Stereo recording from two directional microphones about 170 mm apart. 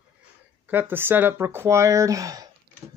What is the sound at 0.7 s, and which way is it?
Speech, 10° right (ahead or behind).